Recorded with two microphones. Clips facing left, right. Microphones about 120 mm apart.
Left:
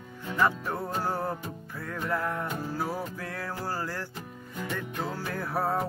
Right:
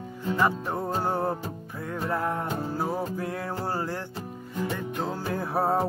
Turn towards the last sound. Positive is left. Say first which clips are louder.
# right 4 dB
turn(degrees=-25)  # may be behind; listen again after turning